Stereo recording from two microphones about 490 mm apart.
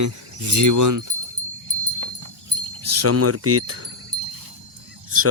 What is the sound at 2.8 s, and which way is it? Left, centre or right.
Speech, right.